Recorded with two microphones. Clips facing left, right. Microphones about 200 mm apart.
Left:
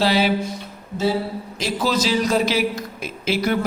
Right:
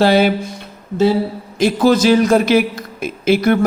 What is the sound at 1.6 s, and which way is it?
Speech, 55° right (ahead or behind).